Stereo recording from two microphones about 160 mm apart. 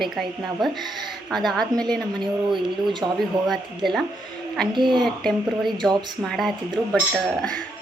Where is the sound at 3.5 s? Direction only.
Centre (ahead or behind).